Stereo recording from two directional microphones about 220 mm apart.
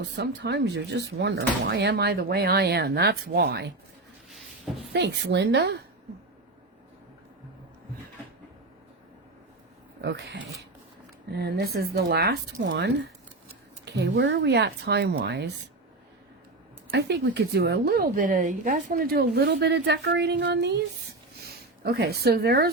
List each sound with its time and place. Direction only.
0.0 s a woman's voice: 50° right (ahead or behind)
4.3 s a sound: centre (ahead or behind)
4.9 s a woman's voice: 50° right (ahead or behind)
10.0 s a woman's voice: 50° right (ahead or behind)
13.9 s a woman's voice: 50° right (ahead or behind)
16.9 s a woman's voice: 50° right (ahead or behind)